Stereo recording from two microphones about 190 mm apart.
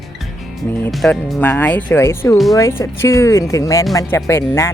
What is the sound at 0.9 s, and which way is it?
Speech, centre (ahead or behind).